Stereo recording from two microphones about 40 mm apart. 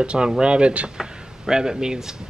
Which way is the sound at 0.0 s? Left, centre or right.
Right.